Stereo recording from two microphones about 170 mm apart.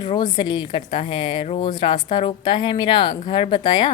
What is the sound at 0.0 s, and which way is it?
A woman's voice, 25° left (ahead or behind).